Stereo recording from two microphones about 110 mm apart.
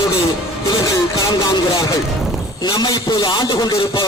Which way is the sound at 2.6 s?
40° left (ahead or behind).